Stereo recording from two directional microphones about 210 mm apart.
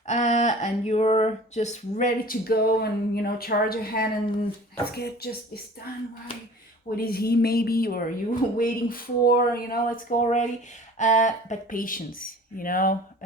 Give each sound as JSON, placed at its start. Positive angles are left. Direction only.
{"t": 0.1, "sound": "a woman's voice", "side_deg": 35}
{"t": 6.8, "sound": "a woman's voice", "side_deg": 45}